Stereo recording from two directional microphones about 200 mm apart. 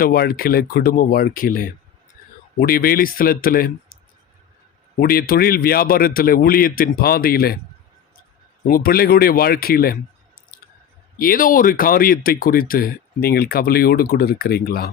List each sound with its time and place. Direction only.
0.0 s speech: 50° left (ahead or behind)
4.9 s speech: 50° left (ahead or behind)
8.6 s speech: 45° left (ahead or behind)
11.2 s speech: 45° left (ahead or behind)